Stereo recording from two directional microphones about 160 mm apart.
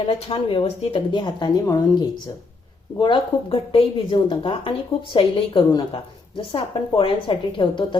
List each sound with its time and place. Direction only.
0.1 s a woman's voice: 35° left (ahead or behind)